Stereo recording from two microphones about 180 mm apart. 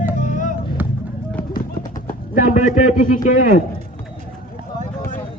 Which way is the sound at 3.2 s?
50° left (ahead or behind).